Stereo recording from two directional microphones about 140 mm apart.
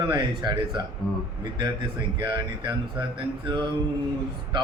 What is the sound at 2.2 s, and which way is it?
Music, 30° right (ahead or behind).